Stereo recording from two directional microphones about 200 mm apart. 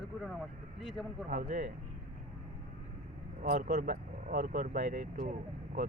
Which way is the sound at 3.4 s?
45° right (ahead or behind).